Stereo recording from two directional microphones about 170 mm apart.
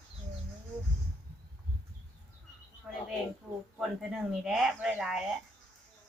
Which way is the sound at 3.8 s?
Centre (ahead or behind).